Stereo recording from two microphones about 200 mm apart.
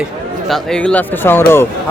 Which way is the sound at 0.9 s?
10° left (ahead or behind).